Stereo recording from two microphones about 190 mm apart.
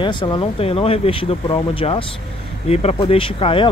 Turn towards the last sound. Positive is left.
turn(degrees=25)  # may be behind; listen again after turning